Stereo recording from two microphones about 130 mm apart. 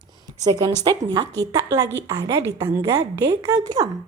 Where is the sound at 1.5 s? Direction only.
25° right (ahead or behind).